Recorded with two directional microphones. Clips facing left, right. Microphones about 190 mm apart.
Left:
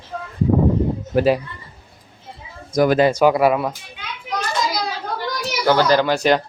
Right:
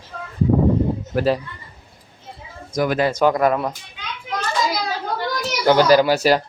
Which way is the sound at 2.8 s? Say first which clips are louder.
Left 5 dB; 35° left (ahead or behind).